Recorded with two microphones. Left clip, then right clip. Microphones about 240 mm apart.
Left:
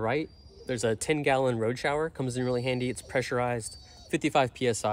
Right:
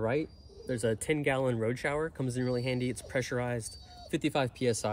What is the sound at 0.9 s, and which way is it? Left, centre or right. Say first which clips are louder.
Speech: left 4 dB; left.